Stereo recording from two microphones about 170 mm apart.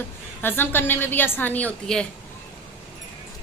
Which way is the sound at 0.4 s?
10° left (ahead or behind).